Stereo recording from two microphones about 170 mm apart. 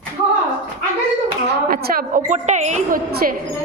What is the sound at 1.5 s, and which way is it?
Speech, 65° right (ahead or behind).